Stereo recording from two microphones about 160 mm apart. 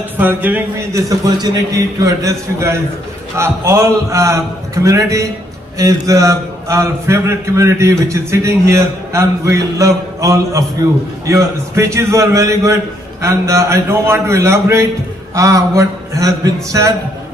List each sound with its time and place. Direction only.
0.2 s a man's voice: 10° right (ahead or behind)